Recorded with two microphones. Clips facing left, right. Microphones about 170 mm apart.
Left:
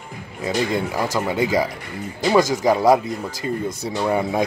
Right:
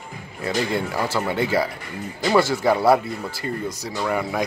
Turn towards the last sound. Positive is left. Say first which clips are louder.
# left 3 dB
turn(degrees=20)  # may be behind; listen again after turning